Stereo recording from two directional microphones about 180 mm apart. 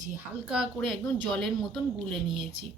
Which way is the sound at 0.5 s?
Centre (ahead or behind).